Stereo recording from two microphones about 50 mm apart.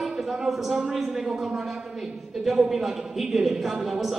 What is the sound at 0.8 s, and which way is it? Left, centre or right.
A woman's voice, centre.